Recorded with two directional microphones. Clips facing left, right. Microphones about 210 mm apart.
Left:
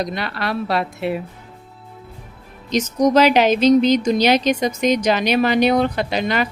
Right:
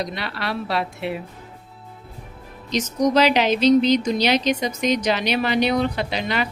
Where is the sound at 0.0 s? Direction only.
45° left (ahead or behind).